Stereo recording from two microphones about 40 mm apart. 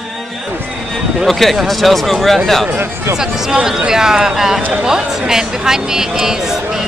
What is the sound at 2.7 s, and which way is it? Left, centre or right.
Speech, right.